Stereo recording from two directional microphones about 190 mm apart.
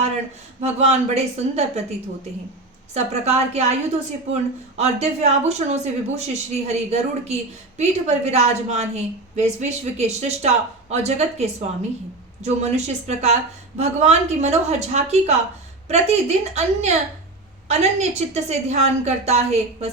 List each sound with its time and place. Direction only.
0.6 s a woman's voice: 35° right (ahead or behind)
2.9 s a woman's voice: 35° right (ahead or behind)
4.8 s a woman's voice: 35° right (ahead or behind)